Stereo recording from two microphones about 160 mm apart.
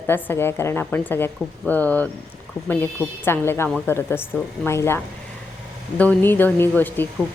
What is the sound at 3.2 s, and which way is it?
Speech, 15° left (ahead or behind).